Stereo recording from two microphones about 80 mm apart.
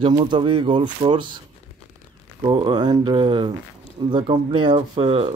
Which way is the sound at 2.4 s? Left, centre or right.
Right.